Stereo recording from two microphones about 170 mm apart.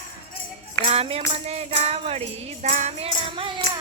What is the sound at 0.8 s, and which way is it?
Tambourine, 35° right (ahead or behind).